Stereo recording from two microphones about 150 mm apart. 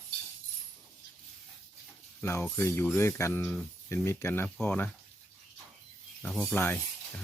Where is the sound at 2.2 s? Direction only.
15° left (ahead or behind).